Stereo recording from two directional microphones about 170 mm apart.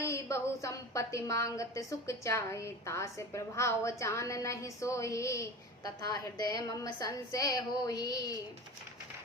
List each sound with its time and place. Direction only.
0.0 s a woman's voice: 15° left (ahead or behind)